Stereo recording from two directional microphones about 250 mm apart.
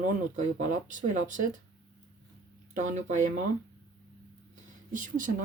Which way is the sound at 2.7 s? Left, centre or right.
Right.